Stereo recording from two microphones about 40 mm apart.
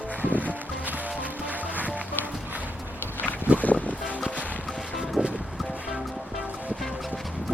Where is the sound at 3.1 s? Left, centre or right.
Left.